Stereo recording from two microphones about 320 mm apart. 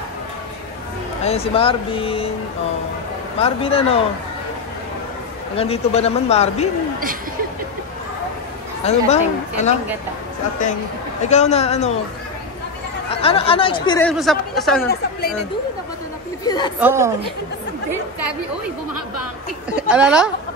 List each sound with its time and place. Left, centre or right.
1.2 s speech: centre
3.3 s speech: centre
5.6 s a man's voice: centre
8.8 s a man's voice: centre
11.2 s a man's voice: left
13.1 s speech: centre
13.8 s speech: centre
16.4 s speech: centre
16.8 s a woman's voice: centre
19.7 s speech: centre